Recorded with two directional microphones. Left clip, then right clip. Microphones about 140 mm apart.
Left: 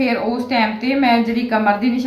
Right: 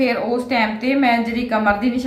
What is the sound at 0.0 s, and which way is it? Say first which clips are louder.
A woman's voice: even; 20° right (ahead or behind).